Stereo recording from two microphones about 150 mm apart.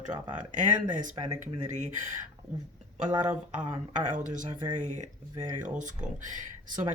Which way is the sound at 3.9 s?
60° right (ahead or behind).